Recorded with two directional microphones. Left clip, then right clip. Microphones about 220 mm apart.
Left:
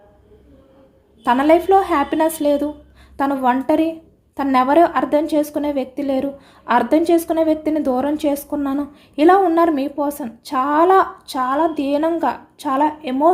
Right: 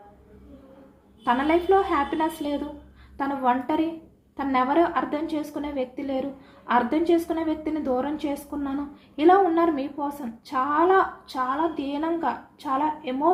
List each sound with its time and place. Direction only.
1.2 s a woman's voice: 50° left (ahead or behind)